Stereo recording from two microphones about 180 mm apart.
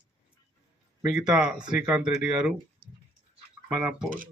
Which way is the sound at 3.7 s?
5° right (ahead or behind).